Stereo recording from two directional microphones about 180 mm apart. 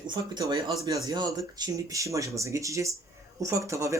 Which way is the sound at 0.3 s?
20° right (ahead or behind).